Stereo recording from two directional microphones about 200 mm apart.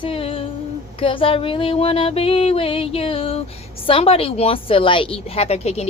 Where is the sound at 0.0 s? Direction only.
30° left (ahead or behind).